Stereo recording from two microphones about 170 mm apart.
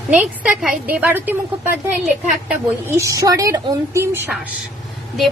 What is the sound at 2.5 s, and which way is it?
A woman's voice, 15° right (ahead or behind).